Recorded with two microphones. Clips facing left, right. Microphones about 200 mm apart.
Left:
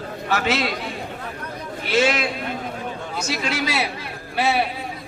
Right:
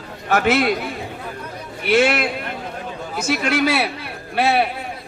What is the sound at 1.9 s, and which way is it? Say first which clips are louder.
Speech: right 3 dB; 60° right (ahead or behind).